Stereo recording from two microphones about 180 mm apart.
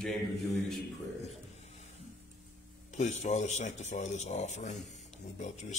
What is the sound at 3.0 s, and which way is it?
A man's voice, 40° left (ahead or behind).